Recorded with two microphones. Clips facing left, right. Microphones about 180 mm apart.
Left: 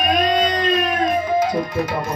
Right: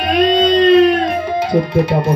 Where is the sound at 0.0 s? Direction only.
65° right (ahead or behind).